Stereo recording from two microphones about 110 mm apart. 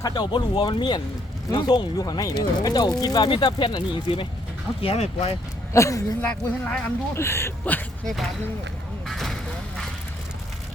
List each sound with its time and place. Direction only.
0.0 s speech: 45° left (ahead or behind)
4.8 s speech: 60° left (ahead or behind)
5.7 s speech: 30° left (ahead or behind)
6.2 s speech: 10° left (ahead or behind)
7.1 s speech: 25° left (ahead or behind)
8.0 s speech: centre (ahead or behind)
9.0 s a sound: centre (ahead or behind)